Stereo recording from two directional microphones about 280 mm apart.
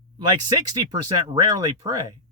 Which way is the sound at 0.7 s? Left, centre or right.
Centre.